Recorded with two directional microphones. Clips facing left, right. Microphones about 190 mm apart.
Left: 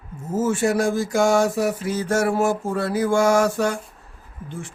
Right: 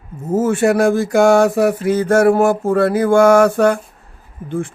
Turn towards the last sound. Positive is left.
turn(degrees=-55)  # may be behind; listen again after turning